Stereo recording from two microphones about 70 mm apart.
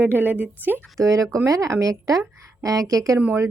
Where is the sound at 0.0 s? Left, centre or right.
Right.